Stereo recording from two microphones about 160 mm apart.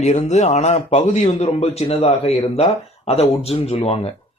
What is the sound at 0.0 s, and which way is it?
A man's voice, 45° left (ahead or behind).